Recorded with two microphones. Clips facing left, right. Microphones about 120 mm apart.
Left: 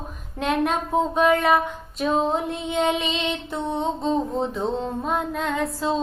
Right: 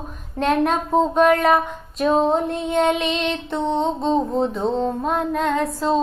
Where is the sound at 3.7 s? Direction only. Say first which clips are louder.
Right 3 dB; 5° left (ahead or behind).